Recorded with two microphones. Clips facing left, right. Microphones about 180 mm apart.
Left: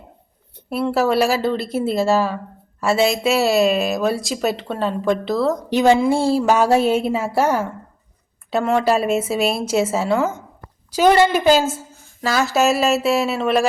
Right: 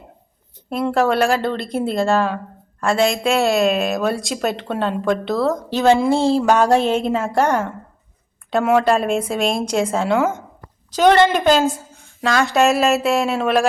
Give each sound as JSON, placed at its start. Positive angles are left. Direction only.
{"t": 0.7, "sound": "speech", "side_deg": 5}
{"t": 5.7, "sound": "a woman's voice", "side_deg": 15}